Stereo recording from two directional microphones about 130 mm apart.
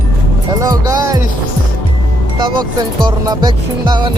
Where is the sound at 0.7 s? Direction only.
30° right (ahead or behind).